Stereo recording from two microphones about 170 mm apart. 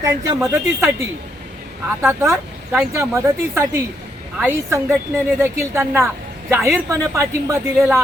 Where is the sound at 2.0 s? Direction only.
10° right (ahead or behind).